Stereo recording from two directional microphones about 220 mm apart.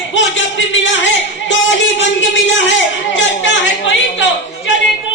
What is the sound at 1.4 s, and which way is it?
A man's voice, 55° left (ahead or behind).